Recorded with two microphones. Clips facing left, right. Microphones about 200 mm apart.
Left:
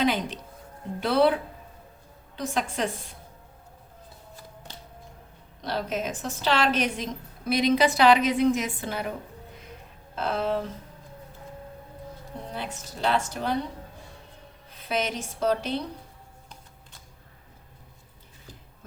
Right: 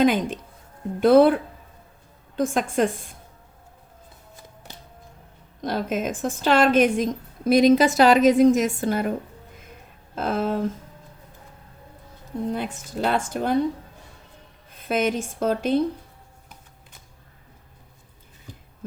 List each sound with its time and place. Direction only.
0.0 s speech: 50° right (ahead or behind)
5.6 s speech: 50° right (ahead or behind)
10.2 s speech: 50° right (ahead or behind)
12.5 s speech: 50° right (ahead or behind)
14.7 s speech: 50° right (ahead or behind)